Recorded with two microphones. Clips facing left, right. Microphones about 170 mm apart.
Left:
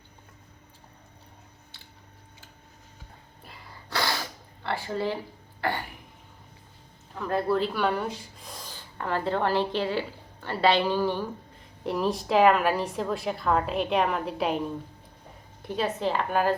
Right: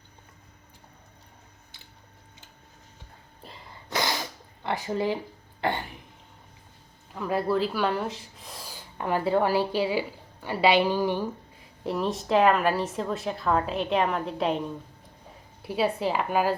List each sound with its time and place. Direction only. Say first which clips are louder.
3.4 s a sound: right 2 dB; 25° right (ahead or behind)
7.2 s a woman's voice: even; 5° right (ahead or behind)
11.8 s a woman's voice: left 1 dB; centre (ahead or behind)
15.6 s a woman's voice: right 2 dB; 5° right (ahead or behind)